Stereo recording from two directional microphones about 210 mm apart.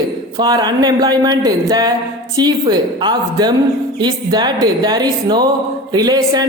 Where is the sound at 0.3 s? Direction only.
20° right (ahead or behind).